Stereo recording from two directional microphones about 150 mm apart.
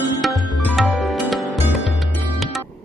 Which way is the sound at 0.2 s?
Centre (ahead or behind).